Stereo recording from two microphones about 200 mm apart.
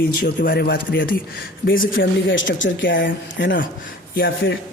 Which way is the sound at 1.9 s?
70° left (ahead or behind).